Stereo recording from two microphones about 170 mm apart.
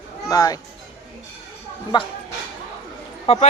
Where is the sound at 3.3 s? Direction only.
35° left (ahead or behind).